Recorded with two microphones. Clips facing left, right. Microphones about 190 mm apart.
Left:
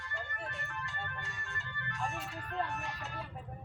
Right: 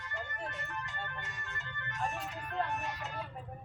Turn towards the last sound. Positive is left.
turn(degrees=-20)  # may be behind; listen again after turning